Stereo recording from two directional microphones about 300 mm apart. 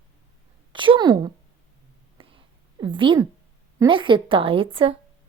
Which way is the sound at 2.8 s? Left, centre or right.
Centre.